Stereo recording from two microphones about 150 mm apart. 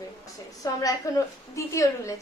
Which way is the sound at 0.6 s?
20° left (ahead or behind).